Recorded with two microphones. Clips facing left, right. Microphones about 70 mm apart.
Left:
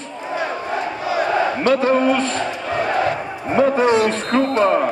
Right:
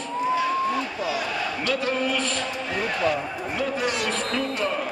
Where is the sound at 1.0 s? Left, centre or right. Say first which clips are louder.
Left 9 dB; left.